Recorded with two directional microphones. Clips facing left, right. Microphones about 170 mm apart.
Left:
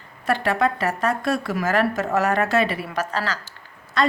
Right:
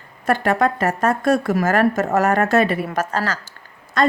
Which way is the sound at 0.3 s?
45° right (ahead or behind).